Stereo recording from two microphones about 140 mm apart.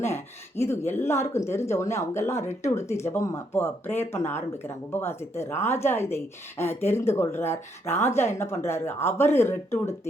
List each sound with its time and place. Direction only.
0.0 s speech: 20° left (ahead or behind)